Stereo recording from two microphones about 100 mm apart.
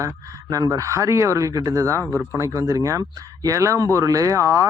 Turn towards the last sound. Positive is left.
turn(degrees=-30)  # may be behind; listen again after turning